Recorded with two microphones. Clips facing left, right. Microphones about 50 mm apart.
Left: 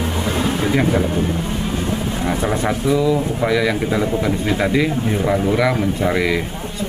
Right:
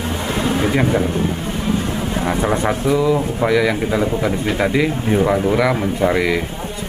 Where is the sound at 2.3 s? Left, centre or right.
Centre.